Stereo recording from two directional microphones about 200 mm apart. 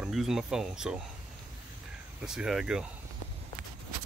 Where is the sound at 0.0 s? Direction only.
Centre (ahead or behind).